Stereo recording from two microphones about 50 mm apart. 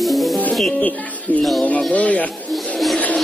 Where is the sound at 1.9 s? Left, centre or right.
Left.